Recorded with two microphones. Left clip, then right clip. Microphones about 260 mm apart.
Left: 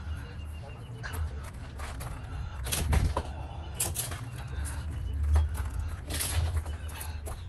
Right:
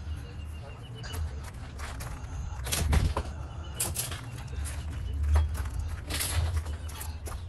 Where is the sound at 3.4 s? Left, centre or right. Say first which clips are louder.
Left 2 dB; centre.